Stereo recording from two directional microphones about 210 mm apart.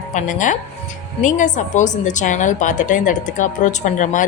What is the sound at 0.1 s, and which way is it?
A woman's voice, 35° left (ahead or behind).